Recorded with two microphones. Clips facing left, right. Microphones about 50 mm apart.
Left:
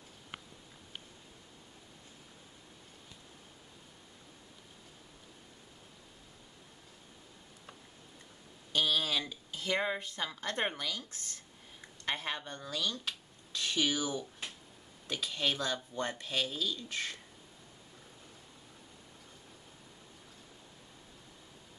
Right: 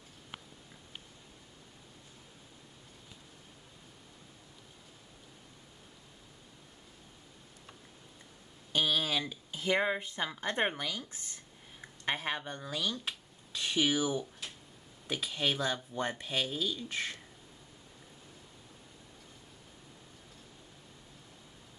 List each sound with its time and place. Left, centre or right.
8.7 s speech: centre